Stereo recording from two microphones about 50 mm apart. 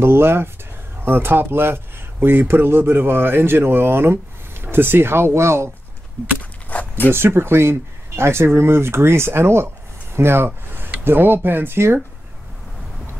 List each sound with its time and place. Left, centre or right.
0.0 s speech: right
6.7 s zipper: left
7.1 s speech: right
10.1 s a sound: right
11.1 s speech: right